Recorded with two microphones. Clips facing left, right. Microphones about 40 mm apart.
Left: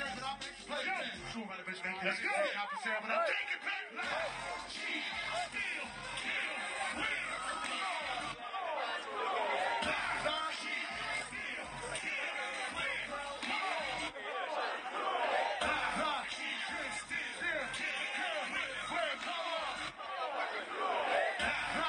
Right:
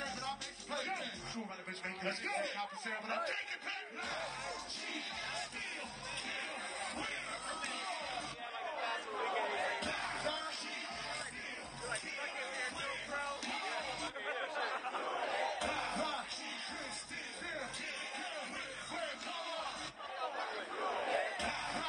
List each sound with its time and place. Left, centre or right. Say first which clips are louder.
0.7 s music: left 3 dB; left
2.0 s a sound: left 5 dB; left
6.3 s a sound: left 4 dB; left
7.8 s music: left 4 dB; left
8.7 s chatter: right 1 dB; left
9.5 s a sound: left 4 dB; left
10.1 s music: left 4 dB; left
13.5 s music: left 4 dB; left
14.7 s a sound: left 2 dB; left
15.8 s music: left 3 dB; left
17.5 s music: left 6 dB; left
20.8 s crowd: left 4 dB; left